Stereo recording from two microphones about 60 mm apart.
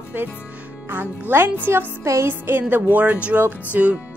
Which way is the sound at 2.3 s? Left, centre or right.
Right.